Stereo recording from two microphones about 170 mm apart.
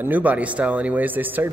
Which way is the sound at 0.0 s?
10° right (ahead or behind).